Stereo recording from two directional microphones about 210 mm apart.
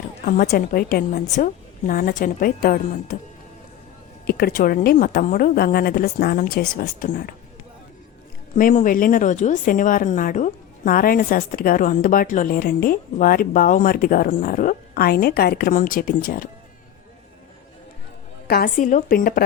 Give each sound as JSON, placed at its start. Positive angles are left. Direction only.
{"t": 0.3, "sound": "a woman's voice", "side_deg": 40}
{"t": 4.3, "sound": "a woman's voice", "side_deg": 50}
{"t": 8.5, "sound": "speech", "side_deg": 40}
{"t": 18.4, "sound": "speech", "side_deg": 45}